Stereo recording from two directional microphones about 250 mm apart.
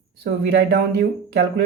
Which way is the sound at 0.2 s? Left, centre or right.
Right.